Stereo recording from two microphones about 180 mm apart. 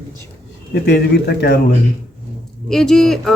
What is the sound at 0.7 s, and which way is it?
Speech, 65° left (ahead or behind).